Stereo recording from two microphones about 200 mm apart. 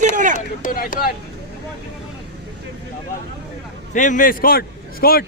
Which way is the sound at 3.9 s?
40° left (ahead or behind).